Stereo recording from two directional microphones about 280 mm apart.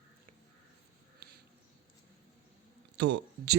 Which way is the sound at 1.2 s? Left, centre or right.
Right.